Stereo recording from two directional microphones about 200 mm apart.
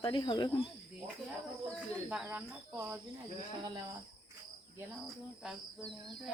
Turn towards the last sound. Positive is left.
turn(degrees=0)  # may be behind; listen again after turning